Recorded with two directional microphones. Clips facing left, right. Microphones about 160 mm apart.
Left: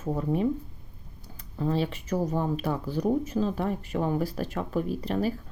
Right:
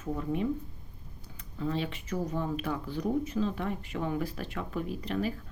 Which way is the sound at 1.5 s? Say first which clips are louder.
Left 5 dB; 40° left (ahead or behind).